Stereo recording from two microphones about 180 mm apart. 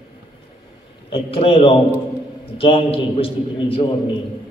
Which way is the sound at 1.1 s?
30° left (ahead or behind).